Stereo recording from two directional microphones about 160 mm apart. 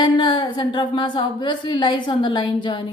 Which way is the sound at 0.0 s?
30° left (ahead or behind).